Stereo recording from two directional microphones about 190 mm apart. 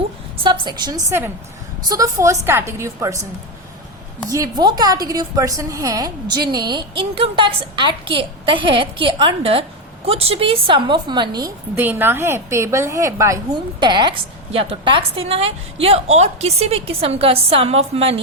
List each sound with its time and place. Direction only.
0.6 s a woman's voice: 20° right (ahead or behind)
4.3 s a woman's voice: 20° right (ahead or behind)